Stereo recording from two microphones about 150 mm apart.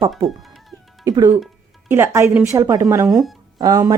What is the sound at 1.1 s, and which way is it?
A woman's voice, 25° right (ahead or behind).